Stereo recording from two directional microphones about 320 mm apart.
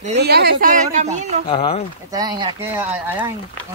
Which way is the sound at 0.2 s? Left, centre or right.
Right.